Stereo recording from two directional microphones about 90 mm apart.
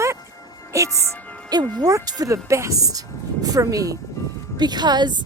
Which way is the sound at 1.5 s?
45° right (ahead or behind).